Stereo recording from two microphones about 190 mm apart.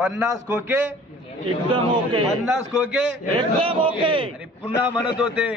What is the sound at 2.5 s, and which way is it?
Speech, 5° right (ahead or behind).